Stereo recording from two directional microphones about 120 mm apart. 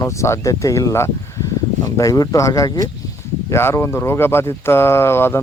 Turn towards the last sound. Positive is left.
turn(degrees=20)  # may be behind; listen again after turning